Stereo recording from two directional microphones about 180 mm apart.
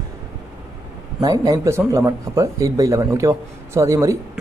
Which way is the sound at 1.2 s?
20° right (ahead or behind).